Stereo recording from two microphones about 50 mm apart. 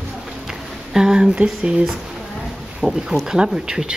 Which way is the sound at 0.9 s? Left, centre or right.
Centre.